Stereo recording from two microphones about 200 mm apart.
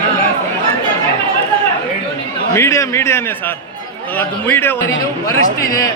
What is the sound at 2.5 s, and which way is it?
Speech, 15° left (ahead or behind).